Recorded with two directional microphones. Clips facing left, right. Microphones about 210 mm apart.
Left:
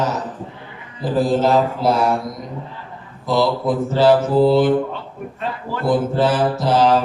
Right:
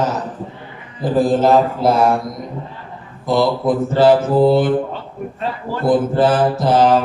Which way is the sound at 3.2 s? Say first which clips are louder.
Right 2 dB; 50° right (ahead or behind).